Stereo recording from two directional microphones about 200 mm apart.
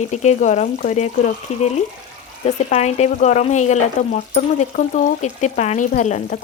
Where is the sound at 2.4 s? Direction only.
35° left (ahead or behind).